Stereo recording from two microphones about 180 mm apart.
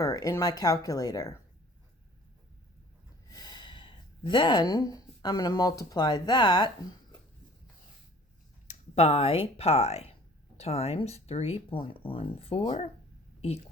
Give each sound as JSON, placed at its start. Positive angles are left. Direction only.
{"t": 0.0, "sound": "speech", "side_deg": 20}
{"t": 3.2, "sound": "speech", "side_deg": 20}
{"t": 8.6, "sound": "speech", "side_deg": 35}